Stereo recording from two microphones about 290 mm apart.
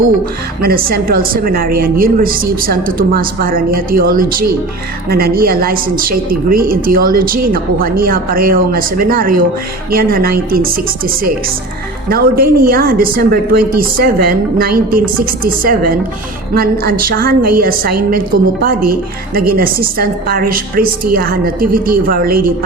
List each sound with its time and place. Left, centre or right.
0.6 s a woman's voice: right